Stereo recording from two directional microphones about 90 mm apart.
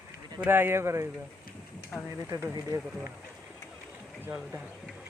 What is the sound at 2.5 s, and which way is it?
Speech, 40° right (ahead or behind).